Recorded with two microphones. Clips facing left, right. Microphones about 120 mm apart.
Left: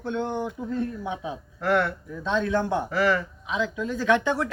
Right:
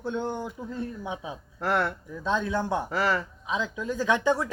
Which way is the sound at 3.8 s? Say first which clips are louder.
Left 4 dB; 15° right (ahead or behind).